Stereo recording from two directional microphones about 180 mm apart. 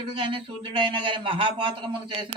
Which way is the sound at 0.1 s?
30° right (ahead or behind).